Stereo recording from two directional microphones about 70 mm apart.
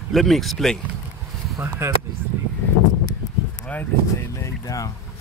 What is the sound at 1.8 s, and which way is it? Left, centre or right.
Speech, right.